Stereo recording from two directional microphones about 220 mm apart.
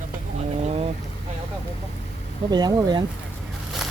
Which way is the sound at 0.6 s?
25° right (ahead or behind).